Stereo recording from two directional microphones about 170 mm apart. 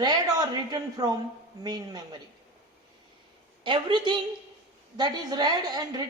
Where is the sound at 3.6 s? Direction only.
30° right (ahead or behind).